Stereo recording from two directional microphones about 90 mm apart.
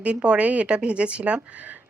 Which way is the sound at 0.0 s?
15° right (ahead or behind).